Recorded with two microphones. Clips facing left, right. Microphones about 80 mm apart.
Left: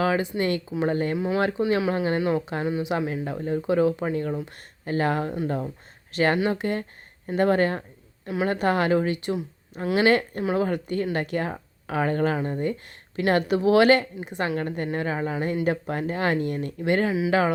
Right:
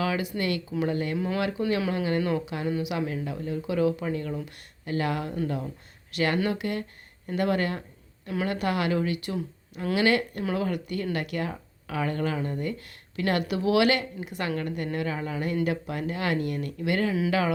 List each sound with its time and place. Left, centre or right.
0.0 s speech: left
1.6 s speech: left
1.9 s speech: left
3.1 s speech: left
17.1 s speech: centre